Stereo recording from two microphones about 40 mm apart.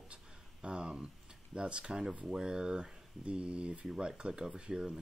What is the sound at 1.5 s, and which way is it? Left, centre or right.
Speech, right.